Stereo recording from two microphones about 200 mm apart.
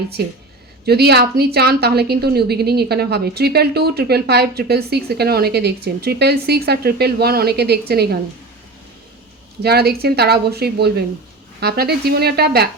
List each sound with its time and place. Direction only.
0.2 s a woman's voice: 55° right (ahead or behind)
9.6 s a woman's voice: 55° right (ahead or behind)